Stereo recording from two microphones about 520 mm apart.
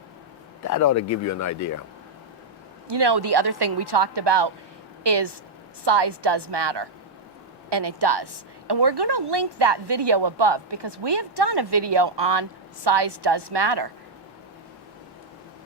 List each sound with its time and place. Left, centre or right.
0.7 s speech: left
2.9 s a woman's voice: right